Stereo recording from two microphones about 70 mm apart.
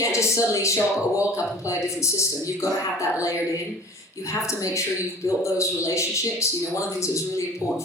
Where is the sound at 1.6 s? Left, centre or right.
Left.